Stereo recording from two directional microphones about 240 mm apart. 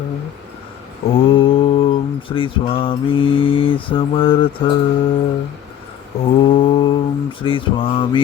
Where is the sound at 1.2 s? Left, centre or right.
Left.